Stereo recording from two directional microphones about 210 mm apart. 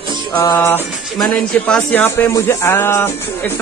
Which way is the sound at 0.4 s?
15° left (ahead or behind).